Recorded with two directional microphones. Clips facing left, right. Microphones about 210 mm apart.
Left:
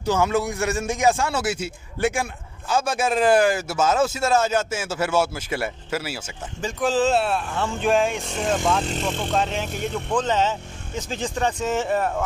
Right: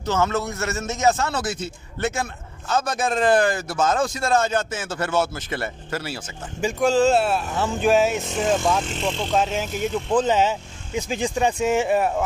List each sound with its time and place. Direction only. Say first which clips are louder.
0.0 s speech: left 2 dB; 10° left (ahead or behind); by 12.3 s 10° right (ahead or behind)